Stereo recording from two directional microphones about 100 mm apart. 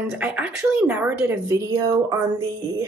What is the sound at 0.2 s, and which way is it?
Speech, 10° right (ahead or behind).